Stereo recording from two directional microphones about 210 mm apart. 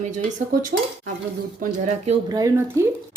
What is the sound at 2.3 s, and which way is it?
Speech, 15° right (ahead or behind).